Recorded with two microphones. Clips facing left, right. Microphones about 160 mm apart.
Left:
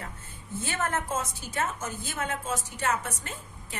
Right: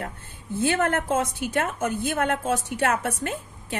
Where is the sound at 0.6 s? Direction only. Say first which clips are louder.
Right 8 dB; 60° right (ahead or behind).